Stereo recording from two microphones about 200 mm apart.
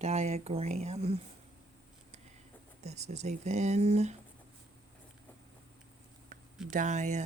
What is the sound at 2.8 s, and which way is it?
A woman's voice, 35° right (ahead or behind).